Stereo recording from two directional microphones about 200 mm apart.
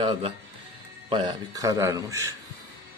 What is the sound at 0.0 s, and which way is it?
A man's voice, 25° right (ahead or behind).